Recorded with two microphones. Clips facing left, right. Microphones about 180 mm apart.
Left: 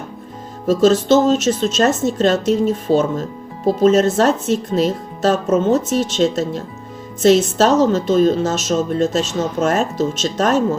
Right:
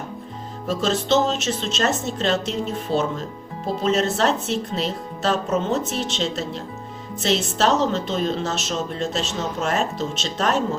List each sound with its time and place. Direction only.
0.7 s a woman's voice: 45° left (ahead or behind)